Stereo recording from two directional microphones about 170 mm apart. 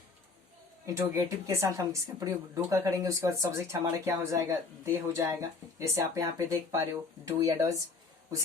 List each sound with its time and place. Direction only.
0.9 s speech: 15° right (ahead or behind)